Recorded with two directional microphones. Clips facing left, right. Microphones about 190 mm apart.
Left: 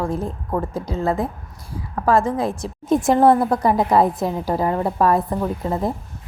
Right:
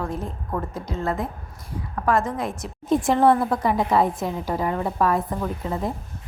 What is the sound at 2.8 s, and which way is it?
A woman's voice, 45° left (ahead or behind).